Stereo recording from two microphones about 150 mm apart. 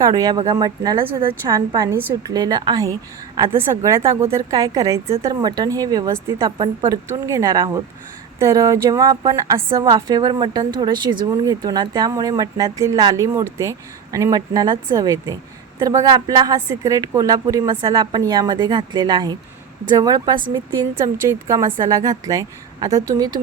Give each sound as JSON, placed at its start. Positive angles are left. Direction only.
{"t": 0.0, "sound": "speech", "side_deg": -25}
{"t": 9.9, "sound": "speech", "side_deg": -30}